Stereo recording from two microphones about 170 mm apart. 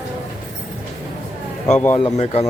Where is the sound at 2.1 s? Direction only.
40° left (ahead or behind).